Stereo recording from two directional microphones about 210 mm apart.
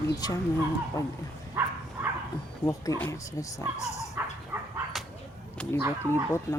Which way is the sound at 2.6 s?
15° left (ahead or behind).